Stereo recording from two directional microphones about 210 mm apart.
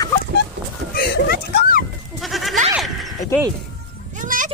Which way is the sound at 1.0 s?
50° left (ahead or behind).